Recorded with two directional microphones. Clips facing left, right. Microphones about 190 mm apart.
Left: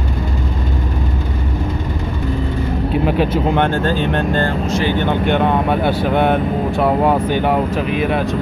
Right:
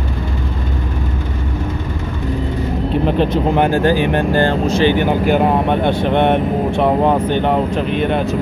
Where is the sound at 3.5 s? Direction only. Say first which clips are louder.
Right 3 dB; 10° right (ahead or behind).